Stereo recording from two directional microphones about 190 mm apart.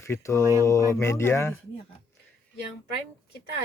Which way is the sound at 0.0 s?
15° left (ahead or behind).